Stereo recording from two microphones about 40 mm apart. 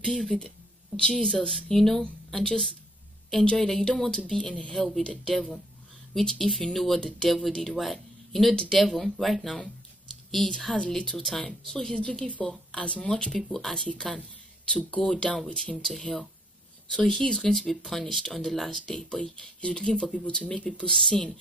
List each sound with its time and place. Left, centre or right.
0.0 s speech: centre
3.4 s speech: centre
4.4 s speech: left
4.7 s speech: centre
7.0 s speech: centre
7.2 s speech: centre
12.7 s speech: left
13.0 s speech: centre
14.7 s speech: left
15.3 s speech: centre
16.9 s speech: centre
18.2 s speech: centre